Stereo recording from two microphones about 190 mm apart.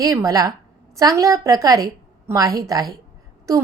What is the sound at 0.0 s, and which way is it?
A woman's voice, 20° right (ahead or behind).